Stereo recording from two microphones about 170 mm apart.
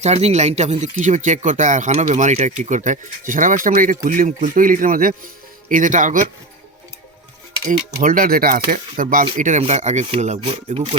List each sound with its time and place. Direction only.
0.0 s speech: 40° right (ahead or behind)
7.7 s speech: 50° right (ahead or behind); by 10.9 s 35° right (ahead or behind)